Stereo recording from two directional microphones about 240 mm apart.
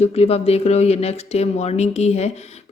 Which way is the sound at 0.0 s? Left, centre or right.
Left.